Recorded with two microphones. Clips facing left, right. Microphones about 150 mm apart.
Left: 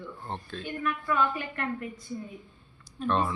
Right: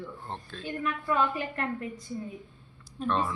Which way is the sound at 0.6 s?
30° right (ahead or behind).